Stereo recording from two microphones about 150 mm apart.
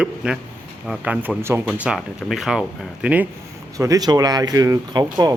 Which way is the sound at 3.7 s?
20° right (ahead or behind).